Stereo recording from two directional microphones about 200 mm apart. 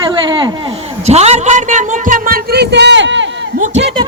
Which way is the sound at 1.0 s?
35° right (ahead or behind).